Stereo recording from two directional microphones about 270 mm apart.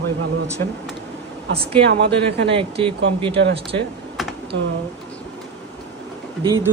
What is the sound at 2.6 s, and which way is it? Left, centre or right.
Speech, centre.